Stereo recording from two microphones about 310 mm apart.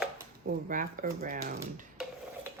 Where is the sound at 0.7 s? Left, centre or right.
Right.